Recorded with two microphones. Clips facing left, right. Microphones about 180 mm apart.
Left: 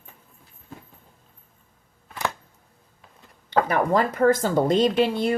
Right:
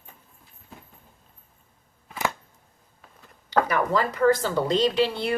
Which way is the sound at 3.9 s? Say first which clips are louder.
Left 2 dB; 50° left (ahead or behind).